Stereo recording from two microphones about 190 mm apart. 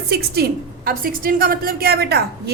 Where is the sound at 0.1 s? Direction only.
60° right (ahead or behind).